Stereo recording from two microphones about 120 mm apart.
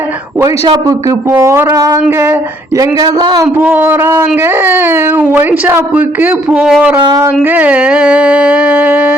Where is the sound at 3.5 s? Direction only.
15° right (ahead or behind).